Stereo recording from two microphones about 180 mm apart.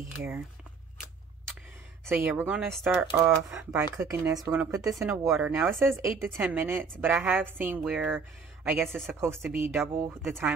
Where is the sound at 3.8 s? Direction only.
15° right (ahead or behind).